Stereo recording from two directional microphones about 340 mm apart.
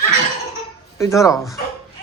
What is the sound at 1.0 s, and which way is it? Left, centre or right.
Speech, centre.